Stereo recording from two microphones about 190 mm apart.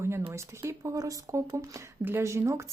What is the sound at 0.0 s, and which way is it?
Speech, 15° right (ahead or behind).